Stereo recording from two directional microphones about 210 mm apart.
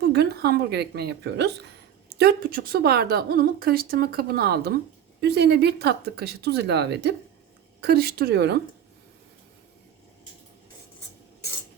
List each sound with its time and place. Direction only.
0.0 s speech: 50° right (ahead or behind)